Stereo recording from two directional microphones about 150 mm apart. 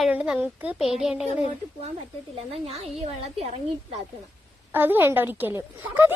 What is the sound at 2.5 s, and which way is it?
A woman's voice, 40° right (ahead or behind).